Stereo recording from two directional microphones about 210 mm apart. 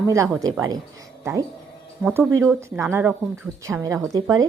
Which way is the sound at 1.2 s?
15° right (ahead or behind).